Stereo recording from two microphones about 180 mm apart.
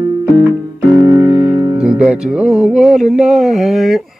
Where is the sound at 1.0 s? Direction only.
20° right (ahead or behind).